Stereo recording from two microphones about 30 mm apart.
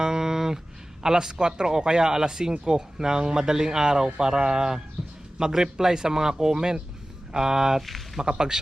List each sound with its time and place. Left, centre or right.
0.0 s a sound: right
1.0 s speech: centre
5.0 s a sound: right
5.4 s a man's voice: centre
7.8 s speech: centre
8.2 s speech: right